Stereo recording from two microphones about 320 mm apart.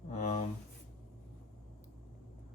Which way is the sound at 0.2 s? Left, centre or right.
Left.